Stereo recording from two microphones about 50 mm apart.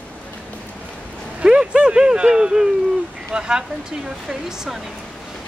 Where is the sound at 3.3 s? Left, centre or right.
Centre.